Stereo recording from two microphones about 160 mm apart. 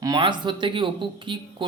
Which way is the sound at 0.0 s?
25° right (ahead or behind).